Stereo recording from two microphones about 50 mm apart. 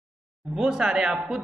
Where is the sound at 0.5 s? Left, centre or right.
Centre.